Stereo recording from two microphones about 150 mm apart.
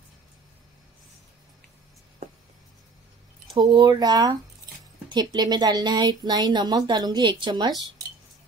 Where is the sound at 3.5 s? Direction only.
30° right (ahead or behind).